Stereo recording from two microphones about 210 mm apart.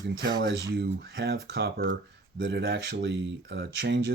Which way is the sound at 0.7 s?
50° right (ahead or behind).